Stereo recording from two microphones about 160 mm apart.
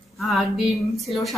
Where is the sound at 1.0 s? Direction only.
Centre (ahead or behind).